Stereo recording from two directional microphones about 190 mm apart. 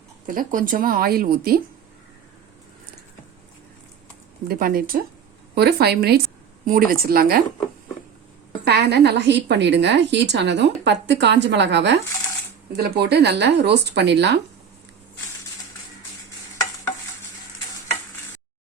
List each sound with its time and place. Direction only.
0.3 s speech: 45° right (ahead or behind)
4.4 s a woman's voice: 50° right (ahead or behind)
8.6 s a woman's voice: 60° right (ahead or behind)
12.7 s a woman's voice: 55° right (ahead or behind)